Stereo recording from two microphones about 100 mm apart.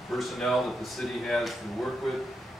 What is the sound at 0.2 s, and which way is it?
A man's voice, centre (ahead or behind).